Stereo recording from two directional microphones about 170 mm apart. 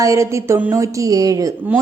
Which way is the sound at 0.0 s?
15° right (ahead or behind).